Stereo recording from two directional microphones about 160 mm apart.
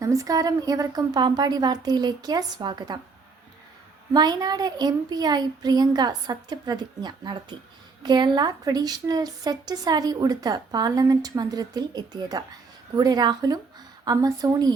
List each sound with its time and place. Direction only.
0.0 s speech: 20° right (ahead or behind)
4.1 s speech: 25° right (ahead or behind)